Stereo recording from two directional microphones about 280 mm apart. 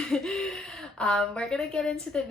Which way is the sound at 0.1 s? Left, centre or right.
Centre.